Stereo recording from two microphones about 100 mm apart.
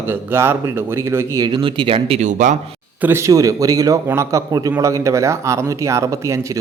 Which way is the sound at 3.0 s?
20° right (ahead or behind).